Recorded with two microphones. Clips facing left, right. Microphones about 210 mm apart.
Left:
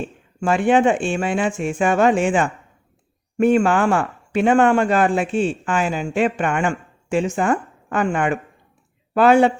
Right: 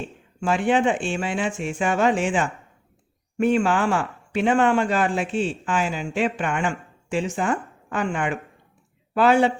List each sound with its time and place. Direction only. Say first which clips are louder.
0.3 s speech: left 4 dB; 50° left (ahead or behind)